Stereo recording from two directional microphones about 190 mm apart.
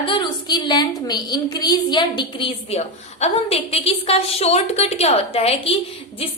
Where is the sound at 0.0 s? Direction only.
25° left (ahead or behind).